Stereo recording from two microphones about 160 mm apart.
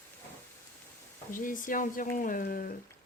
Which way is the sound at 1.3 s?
55° left (ahead or behind).